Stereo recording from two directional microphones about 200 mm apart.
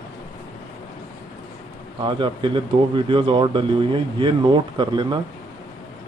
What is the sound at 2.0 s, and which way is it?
A man's voice, 25° right (ahead or behind).